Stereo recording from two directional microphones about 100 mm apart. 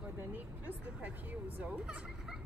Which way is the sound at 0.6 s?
15° right (ahead or behind).